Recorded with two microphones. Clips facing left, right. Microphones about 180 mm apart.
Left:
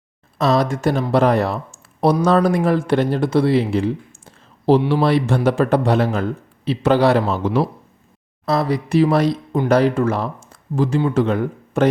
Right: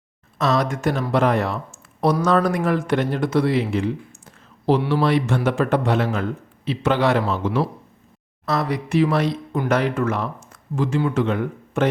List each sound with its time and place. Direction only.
0.3 s speech: 35° left (ahead or behind)
4.3 s a sound: 30° left (ahead or behind)
4.8 s speech: 20° left (ahead or behind)
5.0 s speech: 35° left (ahead or behind)